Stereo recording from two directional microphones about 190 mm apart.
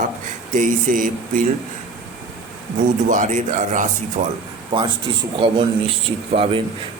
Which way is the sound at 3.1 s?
40° right (ahead or behind).